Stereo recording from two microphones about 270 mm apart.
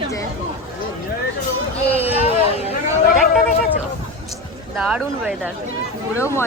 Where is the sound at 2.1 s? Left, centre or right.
Left.